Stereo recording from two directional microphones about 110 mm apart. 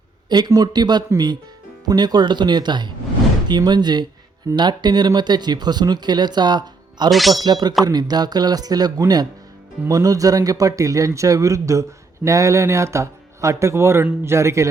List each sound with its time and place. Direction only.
0.3 s speech: 40° right (ahead or behind)
7.1 s a man's voice: centre (ahead or behind)
7.3 s speech: 40° right (ahead or behind)